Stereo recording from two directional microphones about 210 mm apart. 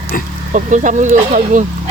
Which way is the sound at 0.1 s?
40° left (ahead or behind).